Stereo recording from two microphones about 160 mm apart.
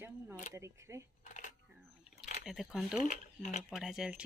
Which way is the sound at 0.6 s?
15° right (ahead or behind).